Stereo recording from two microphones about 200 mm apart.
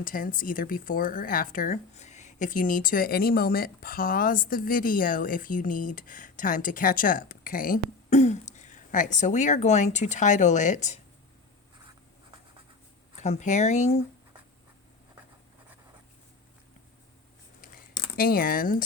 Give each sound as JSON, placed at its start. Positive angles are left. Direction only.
{"t": 0.0, "sound": "speech", "side_deg": 45}
{"t": 13.1, "sound": "speech", "side_deg": 35}
{"t": 18.2, "sound": "speech", "side_deg": 45}